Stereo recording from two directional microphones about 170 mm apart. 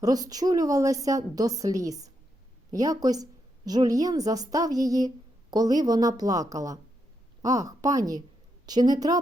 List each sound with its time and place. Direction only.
0.0 s a woman's voice: 20° right (ahead or behind)